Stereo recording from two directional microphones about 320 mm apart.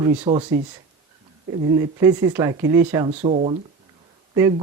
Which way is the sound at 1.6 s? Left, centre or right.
Centre.